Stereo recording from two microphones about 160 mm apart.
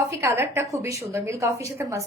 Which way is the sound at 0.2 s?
15° right (ahead or behind).